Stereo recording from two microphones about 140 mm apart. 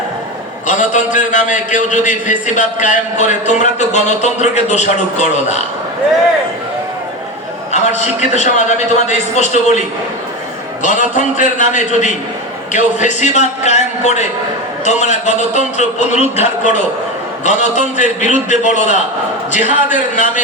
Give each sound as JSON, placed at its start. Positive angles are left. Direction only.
{"t": 0.7, "sound": "a man's voice", "side_deg": 60}
{"t": 7.7, "sound": "a man's voice", "side_deg": 55}
{"t": 10.8, "sound": "a man's voice", "side_deg": 60}